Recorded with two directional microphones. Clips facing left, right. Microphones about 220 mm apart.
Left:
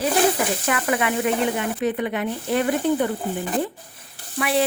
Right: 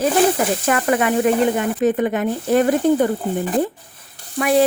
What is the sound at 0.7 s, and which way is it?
Speech, 45° right (ahead or behind).